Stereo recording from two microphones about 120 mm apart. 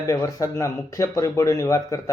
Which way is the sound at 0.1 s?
25° left (ahead or behind).